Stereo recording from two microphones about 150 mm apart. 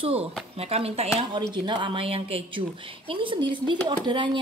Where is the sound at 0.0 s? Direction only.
40° right (ahead or behind).